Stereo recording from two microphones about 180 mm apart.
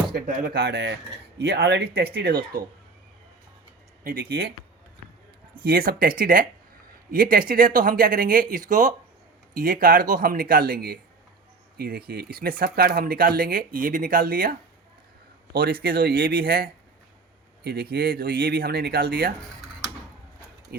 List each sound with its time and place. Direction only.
0.1 s a sound: 55° right (ahead or behind)
0.4 s speech: 60° right (ahead or behind)
4.0 s speech: 55° right (ahead or behind)
5.6 s speech: 55° right (ahead or behind)
15.5 s speech: 55° right (ahead or behind)